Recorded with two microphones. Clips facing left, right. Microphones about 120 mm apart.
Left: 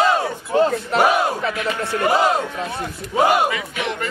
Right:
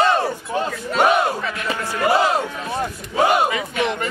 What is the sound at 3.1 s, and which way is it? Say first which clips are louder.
Speech: left 1 dB; centre (ahead or behind).